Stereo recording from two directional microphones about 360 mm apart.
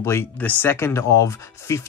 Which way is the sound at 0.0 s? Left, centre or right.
Centre.